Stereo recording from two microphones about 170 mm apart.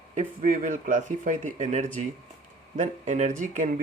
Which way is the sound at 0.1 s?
50° right (ahead or behind).